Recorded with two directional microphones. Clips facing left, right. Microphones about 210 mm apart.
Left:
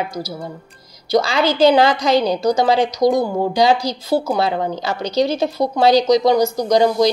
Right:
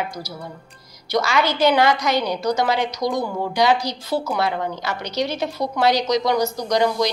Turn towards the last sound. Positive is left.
turn(degrees=35)  # may be behind; listen again after turning